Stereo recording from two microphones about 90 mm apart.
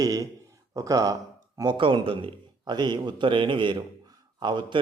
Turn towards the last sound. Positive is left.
turn(degrees=-60)  # may be behind; listen again after turning